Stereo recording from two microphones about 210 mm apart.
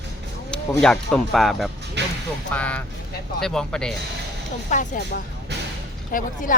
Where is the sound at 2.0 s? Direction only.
55° right (ahead or behind).